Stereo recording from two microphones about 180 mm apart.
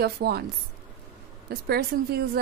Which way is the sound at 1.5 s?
60° right (ahead or behind).